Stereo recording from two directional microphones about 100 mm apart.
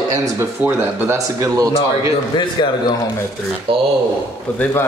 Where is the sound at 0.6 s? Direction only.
20° right (ahead or behind).